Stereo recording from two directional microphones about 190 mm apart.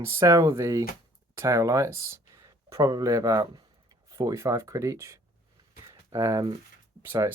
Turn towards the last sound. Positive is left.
turn(degrees=-10)  # may be behind; listen again after turning